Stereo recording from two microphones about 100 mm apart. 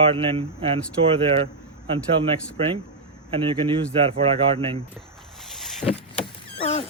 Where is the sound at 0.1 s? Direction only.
70° right (ahead or behind).